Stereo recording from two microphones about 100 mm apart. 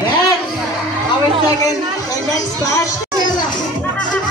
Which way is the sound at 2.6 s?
35° left (ahead or behind).